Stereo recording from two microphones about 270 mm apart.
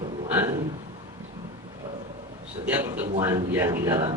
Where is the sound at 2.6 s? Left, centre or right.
Centre.